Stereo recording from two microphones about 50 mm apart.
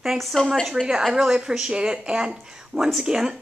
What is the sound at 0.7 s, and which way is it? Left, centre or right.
A woman's voice, centre.